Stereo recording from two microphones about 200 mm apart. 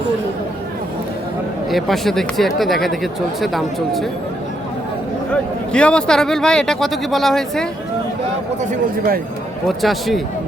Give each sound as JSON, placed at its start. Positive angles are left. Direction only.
{"t": 1.7, "sound": "speech", "side_deg": 0}
{"t": 5.3, "sound": "speech", "side_deg": 5}
{"t": 8.7, "sound": "speech", "side_deg": -45}
{"t": 9.6, "sound": "speech", "side_deg": 0}